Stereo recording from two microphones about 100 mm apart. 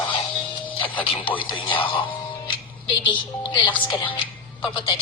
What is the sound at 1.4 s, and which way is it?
Speech, 55° left (ahead or behind).